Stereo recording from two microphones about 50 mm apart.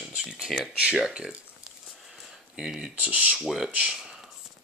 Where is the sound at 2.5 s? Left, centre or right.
Centre.